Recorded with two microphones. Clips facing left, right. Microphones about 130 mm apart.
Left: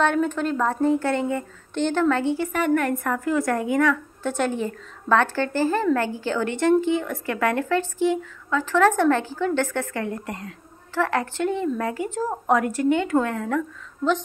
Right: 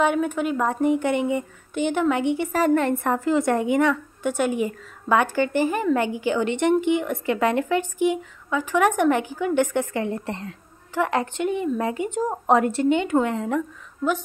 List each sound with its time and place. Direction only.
0.0 s speech: 10° right (ahead or behind)
2.5 s speech: 30° right (ahead or behind)
4.2 s speech: 10° right (ahead or behind)